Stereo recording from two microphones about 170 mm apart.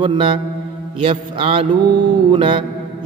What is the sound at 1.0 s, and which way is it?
Mantra, 30° right (ahead or behind).